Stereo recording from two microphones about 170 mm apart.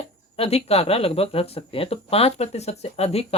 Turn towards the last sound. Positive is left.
turn(degrees=35)  # may be behind; listen again after turning